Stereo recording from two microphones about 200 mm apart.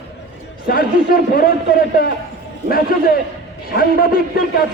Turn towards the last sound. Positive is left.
turn(degrees=50)  # may be behind; listen again after turning